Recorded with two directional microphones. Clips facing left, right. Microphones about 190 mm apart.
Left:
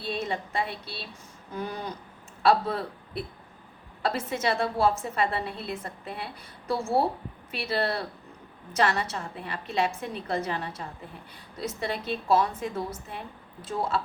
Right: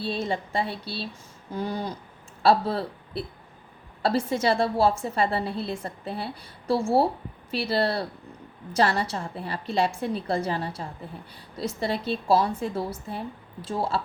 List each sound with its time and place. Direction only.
0.0 s a woman's voice: 30° right (ahead or behind)